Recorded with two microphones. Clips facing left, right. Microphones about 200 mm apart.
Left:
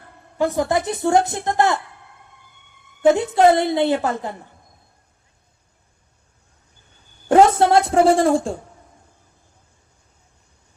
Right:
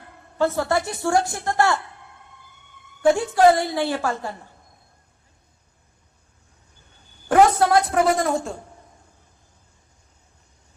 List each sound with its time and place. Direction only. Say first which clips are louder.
0.3 s a woman's voice: left 2 dB; 15° left (ahead or behind)
3.0 s a woman's voice: left 2 dB; 20° left (ahead or behind)
7.3 s a sound: left 3 dB; 25° left (ahead or behind)